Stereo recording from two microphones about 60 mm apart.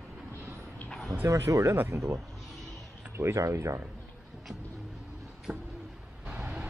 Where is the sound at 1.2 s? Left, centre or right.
Right.